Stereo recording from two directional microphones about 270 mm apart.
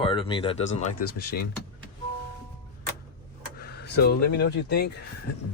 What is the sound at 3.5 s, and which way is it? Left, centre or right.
Vehicle, left.